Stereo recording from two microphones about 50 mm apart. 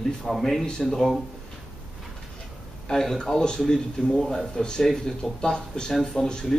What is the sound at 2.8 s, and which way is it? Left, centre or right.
Speech, centre.